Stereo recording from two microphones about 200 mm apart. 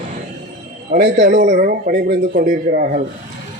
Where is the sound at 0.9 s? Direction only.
55° right (ahead or behind).